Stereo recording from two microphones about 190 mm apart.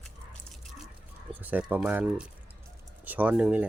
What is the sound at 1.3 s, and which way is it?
Speech, 10° right (ahead or behind).